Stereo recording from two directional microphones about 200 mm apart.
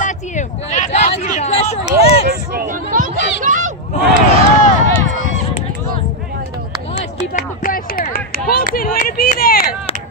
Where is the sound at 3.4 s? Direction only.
40° right (ahead or behind).